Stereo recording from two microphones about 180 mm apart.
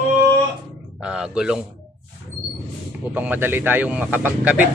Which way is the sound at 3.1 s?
10° right (ahead or behind).